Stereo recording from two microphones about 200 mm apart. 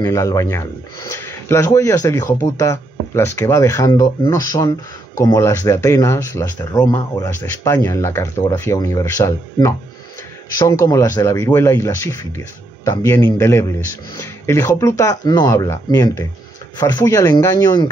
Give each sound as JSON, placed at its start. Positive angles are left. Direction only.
{"t": 0.0, "sound": "speech", "side_deg": 15}